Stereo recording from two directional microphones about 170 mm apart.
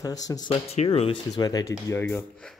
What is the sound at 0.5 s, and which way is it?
Speech, 35° left (ahead or behind).